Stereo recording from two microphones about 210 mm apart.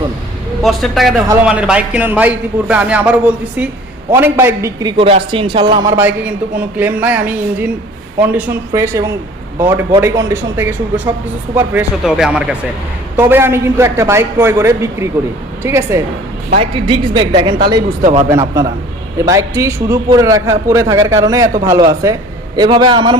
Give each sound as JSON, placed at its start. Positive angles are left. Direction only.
{"t": 0.6, "sound": "a man's voice", "side_deg": 0}
{"t": 16.6, "sound": "a man's voice", "side_deg": -25}
{"t": 18.3, "sound": "a man's voice", "side_deg": -15}